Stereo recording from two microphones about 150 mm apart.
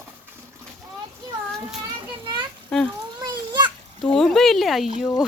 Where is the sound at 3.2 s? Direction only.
30° right (ahead or behind).